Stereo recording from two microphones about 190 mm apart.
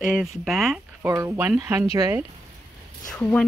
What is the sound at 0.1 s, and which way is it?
Speech, centre (ahead or behind).